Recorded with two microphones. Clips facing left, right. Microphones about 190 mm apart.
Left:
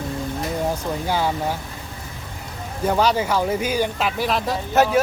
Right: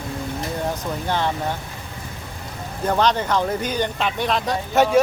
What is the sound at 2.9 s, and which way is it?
Speech, 10° left (ahead or behind).